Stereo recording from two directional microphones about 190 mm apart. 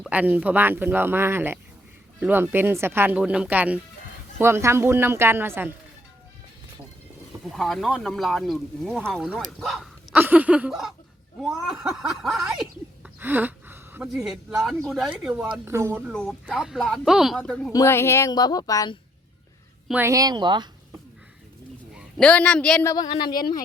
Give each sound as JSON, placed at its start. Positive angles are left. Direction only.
{"t": 0.0, "sound": "speech", "side_deg": -10}
{"t": 7.5, "sound": "speech", "side_deg": 0}
{"t": 9.6, "sound": "hiccup", "side_deg": 0}
{"t": 11.7, "sound": "speech", "side_deg": -5}
{"t": 13.1, "sound": "gasp", "side_deg": -10}
{"t": 14.3, "sound": "speech", "side_deg": 0}
{"t": 16.0, "sound": "speech", "side_deg": 0}
{"t": 17.7, "sound": "a woman's voice", "side_deg": 15}
{"t": 19.9, "sound": "speech", "side_deg": -15}
{"t": 21.9, "sound": "a man's voice", "side_deg": 5}
{"t": 22.9, "sound": "a woman's voice", "side_deg": 20}